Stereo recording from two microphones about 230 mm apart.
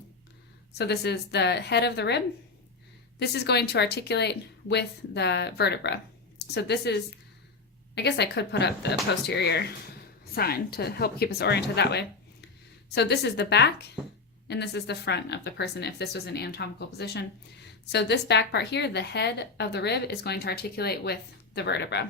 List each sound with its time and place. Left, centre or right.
0.8 s speech: left